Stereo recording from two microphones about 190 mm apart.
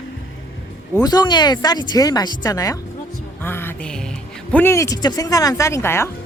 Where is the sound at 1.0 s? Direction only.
20° left (ahead or behind).